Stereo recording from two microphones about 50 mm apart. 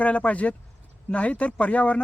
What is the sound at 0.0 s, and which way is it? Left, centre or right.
Speech, left.